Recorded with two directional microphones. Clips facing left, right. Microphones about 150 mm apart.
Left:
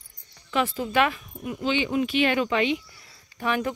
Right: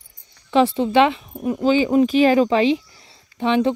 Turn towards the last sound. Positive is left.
turn(degrees=-25)  # may be behind; listen again after turning